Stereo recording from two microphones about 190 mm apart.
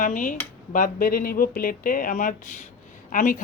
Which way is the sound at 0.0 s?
45° left (ahead or behind).